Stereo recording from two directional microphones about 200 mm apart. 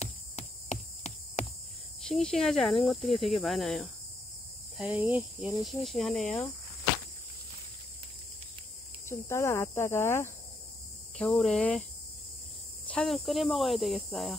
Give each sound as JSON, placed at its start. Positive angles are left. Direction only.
{"t": 0.0, "sound": "a sound", "side_deg": 35}
{"t": 2.0, "sound": "speech", "side_deg": 0}
{"t": 9.1, "sound": "speech", "side_deg": 15}
{"t": 12.8, "sound": "speech", "side_deg": 5}